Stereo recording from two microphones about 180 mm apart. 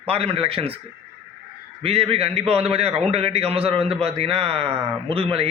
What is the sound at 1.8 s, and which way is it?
A man's voice, 30° right (ahead or behind).